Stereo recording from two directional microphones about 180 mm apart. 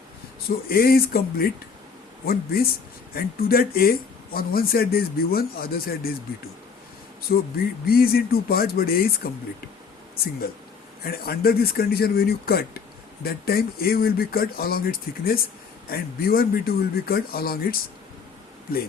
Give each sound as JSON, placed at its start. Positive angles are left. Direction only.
{"t": 0.7, "sound": "speech", "side_deg": 55}
{"t": 7.3, "sound": "speech", "side_deg": 65}
{"t": 11.0, "sound": "speech", "side_deg": 60}